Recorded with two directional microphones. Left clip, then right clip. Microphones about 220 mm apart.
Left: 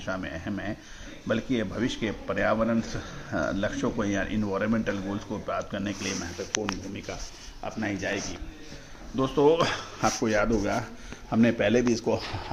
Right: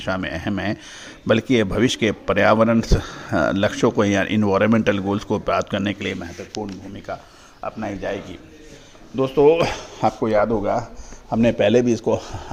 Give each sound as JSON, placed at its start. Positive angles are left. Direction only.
{"t": 0.0, "sound": "speech", "side_deg": -40}
{"t": 7.6, "sound": "speech", "side_deg": -20}
{"t": 11.3, "sound": "speech", "side_deg": -30}